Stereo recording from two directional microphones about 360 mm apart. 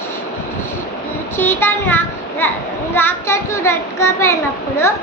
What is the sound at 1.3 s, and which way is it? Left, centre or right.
A child's voice, centre.